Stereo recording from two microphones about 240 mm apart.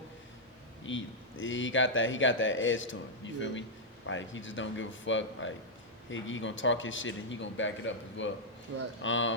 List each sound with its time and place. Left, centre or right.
0.9 s speech: left